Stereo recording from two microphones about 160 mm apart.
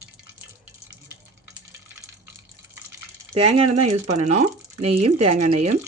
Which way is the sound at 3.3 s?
40° right (ahead or behind).